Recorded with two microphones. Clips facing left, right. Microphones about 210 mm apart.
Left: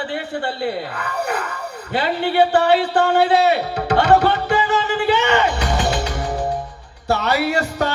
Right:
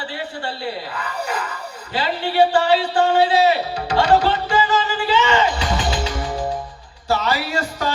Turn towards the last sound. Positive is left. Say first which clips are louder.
# left 4 dB
turn(degrees=65)  # may be behind; listen again after turning